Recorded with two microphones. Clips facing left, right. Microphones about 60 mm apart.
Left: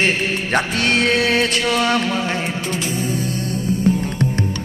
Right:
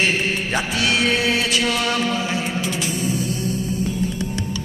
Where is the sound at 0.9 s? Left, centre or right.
Centre.